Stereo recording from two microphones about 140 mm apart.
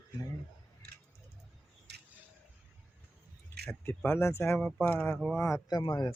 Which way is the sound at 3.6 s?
10° left (ahead or behind).